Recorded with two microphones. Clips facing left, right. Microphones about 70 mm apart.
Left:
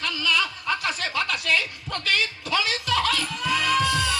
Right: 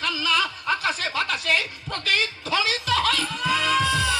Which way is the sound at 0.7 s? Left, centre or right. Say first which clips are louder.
Right 3 dB; centre.